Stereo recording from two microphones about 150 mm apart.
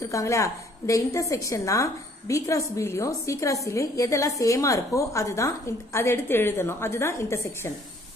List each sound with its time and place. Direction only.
0.1 s a woman's voice: 20° left (ahead or behind)